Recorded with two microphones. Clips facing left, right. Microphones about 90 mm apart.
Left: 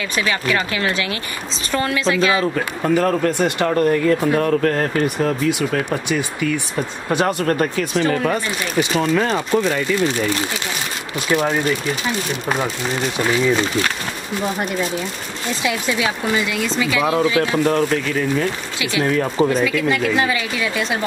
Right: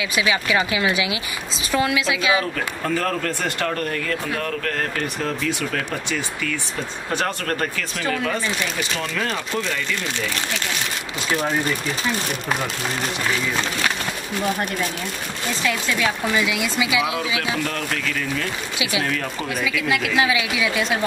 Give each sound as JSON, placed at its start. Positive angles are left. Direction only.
{"t": 0.1, "sound": "speech", "side_deg": -10}
{"t": 2.5, "sound": "speech", "side_deg": 20}
{"t": 4.3, "sound": "speech", "side_deg": 30}
{"t": 5.0, "sound": "speech", "side_deg": 15}
{"t": 9.1, "sound": "speech", "side_deg": 25}
{"t": 16.3, "sound": "speech", "side_deg": -5}
{"t": 17.0, "sound": "speech", "side_deg": 40}
{"t": 17.6, "sound": "speech", "side_deg": 25}
{"t": 19.5, "sound": "speech", "side_deg": -5}